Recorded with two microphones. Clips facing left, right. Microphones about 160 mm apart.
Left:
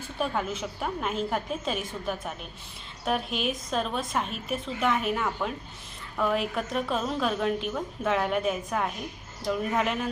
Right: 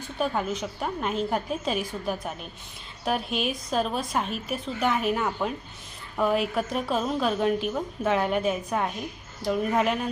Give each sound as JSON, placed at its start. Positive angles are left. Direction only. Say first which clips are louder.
{"t": 0.2, "sound": "a woman's voice", "louder": "right 2 dB", "side_deg": 0}